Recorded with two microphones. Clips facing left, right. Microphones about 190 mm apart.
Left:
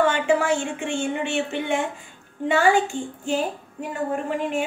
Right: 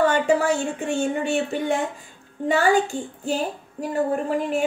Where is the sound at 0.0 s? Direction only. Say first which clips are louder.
Right 1 dB; 40° right (ahead or behind).